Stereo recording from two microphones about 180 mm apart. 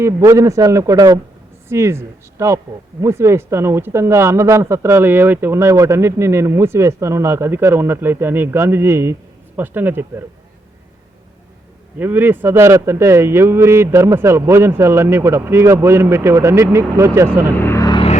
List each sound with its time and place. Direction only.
0.0 s a man's voice: 20° right (ahead or behind)
11.9 s speech: 10° right (ahead or behind)
17.6 s vehicle: 15° left (ahead or behind)